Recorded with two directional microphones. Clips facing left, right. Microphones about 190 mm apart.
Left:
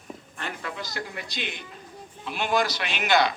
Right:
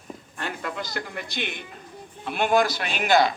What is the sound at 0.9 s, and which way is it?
Speech, 55° right (ahead or behind).